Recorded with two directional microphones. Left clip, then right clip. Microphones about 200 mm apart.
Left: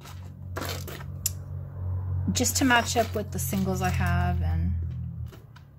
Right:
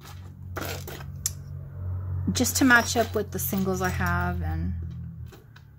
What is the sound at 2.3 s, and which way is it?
Speech, 20° right (ahead or behind).